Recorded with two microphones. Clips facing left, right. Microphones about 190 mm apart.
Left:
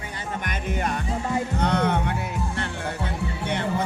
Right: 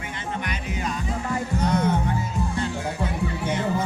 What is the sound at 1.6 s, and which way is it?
Music, 65° left (ahead or behind).